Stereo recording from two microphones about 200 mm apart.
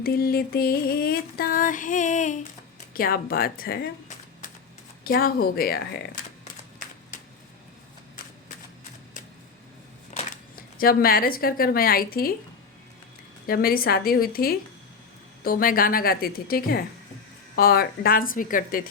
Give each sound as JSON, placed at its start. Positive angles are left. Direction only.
{"t": 0.0, "sound": "music", "side_deg": 50}
{"t": 5.0, "sound": "music", "side_deg": 50}
{"t": 10.1, "sound": "a sound", "side_deg": 35}
{"t": 10.5, "sound": "music", "side_deg": 45}
{"t": 13.5, "sound": "music", "side_deg": 50}